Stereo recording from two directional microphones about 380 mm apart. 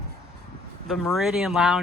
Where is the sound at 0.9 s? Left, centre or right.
Centre.